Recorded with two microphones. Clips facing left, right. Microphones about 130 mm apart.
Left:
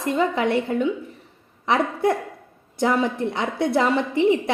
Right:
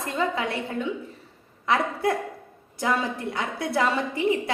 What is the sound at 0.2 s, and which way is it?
Speech, 25° left (ahead or behind).